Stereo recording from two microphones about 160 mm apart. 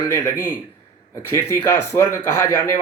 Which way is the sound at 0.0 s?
20° left (ahead or behind).